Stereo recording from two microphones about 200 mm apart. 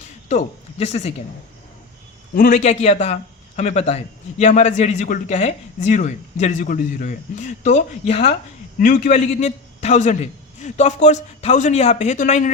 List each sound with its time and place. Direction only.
0.3 s speech: 35° left (ahead or behind)
2.3 s a man's voice: 45° left (ahead or behind)